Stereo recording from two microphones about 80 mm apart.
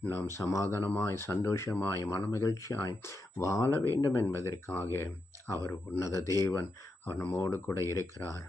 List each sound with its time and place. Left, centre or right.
0.3 s speech: left
6.5 s speech: left